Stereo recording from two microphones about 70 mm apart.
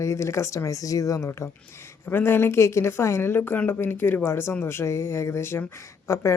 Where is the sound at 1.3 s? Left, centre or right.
Left.